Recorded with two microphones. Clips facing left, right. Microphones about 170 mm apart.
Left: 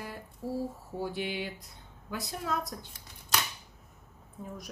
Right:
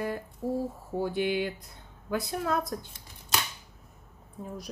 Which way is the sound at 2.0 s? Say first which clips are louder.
Right 6 dB; 55° right (ahead or behind).